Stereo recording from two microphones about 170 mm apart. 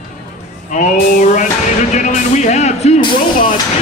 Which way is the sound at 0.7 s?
45° left (ahead or behind).